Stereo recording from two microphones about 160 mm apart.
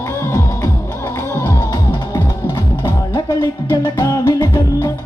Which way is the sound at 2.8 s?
25° left (ahead or behind).